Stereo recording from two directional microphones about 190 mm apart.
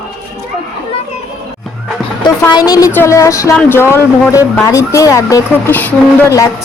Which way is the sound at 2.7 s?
15° left (ahead or behind).